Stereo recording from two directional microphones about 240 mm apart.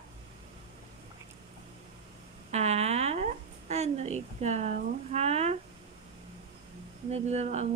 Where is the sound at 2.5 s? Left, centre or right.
Right.